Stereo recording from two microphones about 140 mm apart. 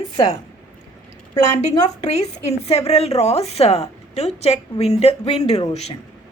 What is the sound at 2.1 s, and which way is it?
A woman's voice, 50° left (ahead or behind).